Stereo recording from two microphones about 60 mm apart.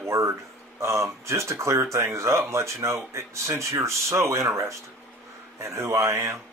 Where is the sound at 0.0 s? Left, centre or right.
Right.